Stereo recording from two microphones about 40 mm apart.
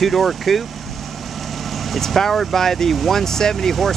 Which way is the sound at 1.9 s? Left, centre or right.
Centre.